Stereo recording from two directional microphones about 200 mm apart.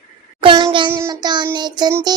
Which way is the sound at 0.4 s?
25° right (ahead or behind).